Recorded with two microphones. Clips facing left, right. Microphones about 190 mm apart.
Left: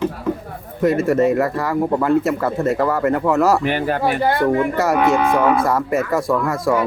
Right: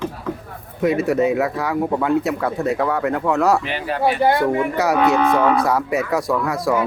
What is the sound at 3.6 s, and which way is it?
Speech, 50° left (ahead or behind).